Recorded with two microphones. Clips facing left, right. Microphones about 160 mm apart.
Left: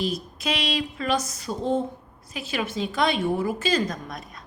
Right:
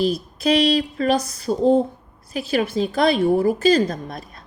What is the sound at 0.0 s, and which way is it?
A woman's voice, 35° right (ahead or behind).